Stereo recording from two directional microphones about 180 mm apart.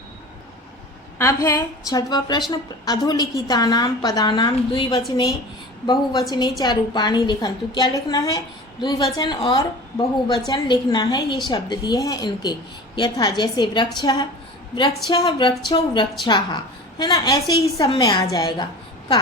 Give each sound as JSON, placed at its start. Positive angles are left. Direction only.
{"t": 1.2, "sound": "a woman's voice", "side_deg": 15}